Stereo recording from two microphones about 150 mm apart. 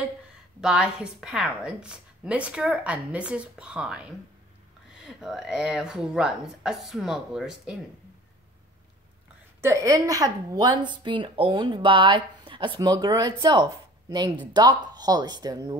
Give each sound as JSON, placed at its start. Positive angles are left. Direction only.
{"t": 0.6, "sound": "a woman's voice", "side_deg": -5}
{"t": 9.6, "sound": "a woman's voice", "side_deg": -20}